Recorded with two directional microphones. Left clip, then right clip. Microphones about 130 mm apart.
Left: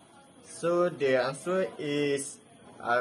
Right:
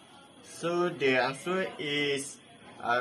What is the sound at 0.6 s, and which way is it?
Speech, 90° left.